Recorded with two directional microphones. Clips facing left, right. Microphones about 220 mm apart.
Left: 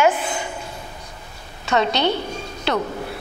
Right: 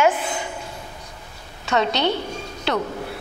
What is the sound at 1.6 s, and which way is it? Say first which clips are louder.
Speech: left 1 dB; 15° left (ahead or behind).